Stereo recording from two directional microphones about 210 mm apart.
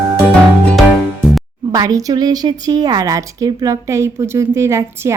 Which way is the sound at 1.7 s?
15° right (ahead or behind).